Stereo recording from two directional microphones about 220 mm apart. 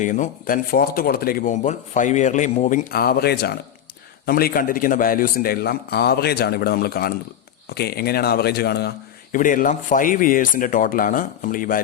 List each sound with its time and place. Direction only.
0.0 s a man's voice: 35° left (ahead or behind)